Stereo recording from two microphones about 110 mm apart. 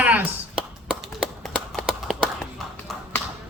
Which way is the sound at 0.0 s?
15° right (ahead or behind).